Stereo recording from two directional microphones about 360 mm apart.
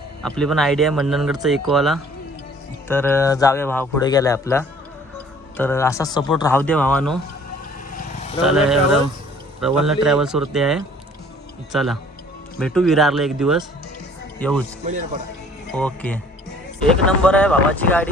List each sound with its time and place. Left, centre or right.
0.2 s speech: centre
7.9 s vehicle: centre
8.4 s a man's voice: centre
15.7 s speech: centre